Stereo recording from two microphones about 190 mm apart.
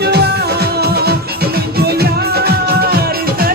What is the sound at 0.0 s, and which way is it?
Music, 60° right (ahead or behind).